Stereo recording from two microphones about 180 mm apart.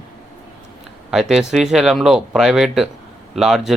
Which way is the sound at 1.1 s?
Centre (ahead or behind).